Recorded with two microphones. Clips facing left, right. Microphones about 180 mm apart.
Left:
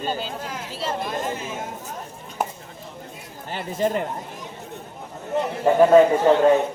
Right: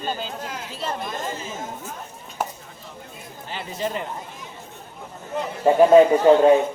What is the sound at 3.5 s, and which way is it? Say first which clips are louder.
Speech: left 5 dB; 45° left (ahead or behind).